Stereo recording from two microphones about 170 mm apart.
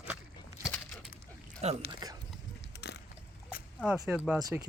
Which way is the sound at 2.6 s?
85° left.